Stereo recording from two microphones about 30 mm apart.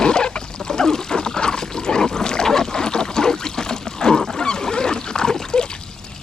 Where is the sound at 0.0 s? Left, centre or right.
Left.